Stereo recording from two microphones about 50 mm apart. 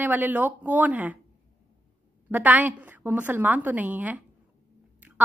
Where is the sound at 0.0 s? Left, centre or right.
Right.